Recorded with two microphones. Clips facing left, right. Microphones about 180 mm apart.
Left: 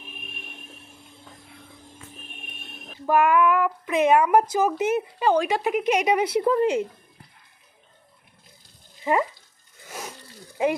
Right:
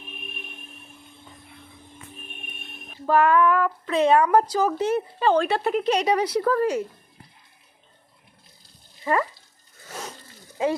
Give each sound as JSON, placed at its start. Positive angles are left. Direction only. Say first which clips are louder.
{"t": 3.1, "sound": "speech", "louder": "right 1 dB", "side_deg": 15}
{"t": 9.0, "sound": "a sound", "louder": "left 1 dB", "side_deg": 15}
{"t": 9.9, "sound": "roaring cats", "louder": "even", "side_deg": 10}